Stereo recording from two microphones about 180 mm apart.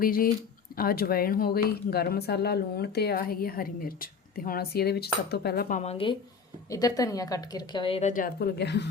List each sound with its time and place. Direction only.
0.0 s speech: 50° left (ahead or behind); by 6.1 s 30° left (ahead or behind)
6.7 s a woman's voice: 20° left (ahead or behind)
8.1 s speech: 55° left (ahead or behind)